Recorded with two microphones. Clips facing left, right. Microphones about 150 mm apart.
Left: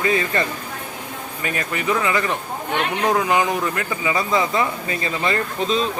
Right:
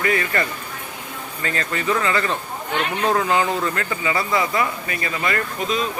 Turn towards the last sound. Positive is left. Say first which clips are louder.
# left 2 dB
turn(degrees=30)  # may be behind; listen again after turning